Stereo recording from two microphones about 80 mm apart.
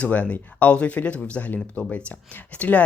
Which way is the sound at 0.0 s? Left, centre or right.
Centre.